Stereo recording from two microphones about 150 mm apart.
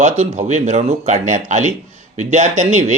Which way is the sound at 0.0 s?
50° right (ahead or behind).